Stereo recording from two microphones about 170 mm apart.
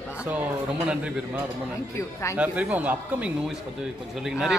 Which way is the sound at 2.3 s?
10° right (ahead or behind).